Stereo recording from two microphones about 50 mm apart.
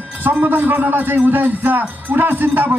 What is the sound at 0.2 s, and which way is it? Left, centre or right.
A man's voice, right.